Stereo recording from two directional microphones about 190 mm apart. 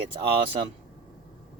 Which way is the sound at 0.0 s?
30° right (ahead or behind).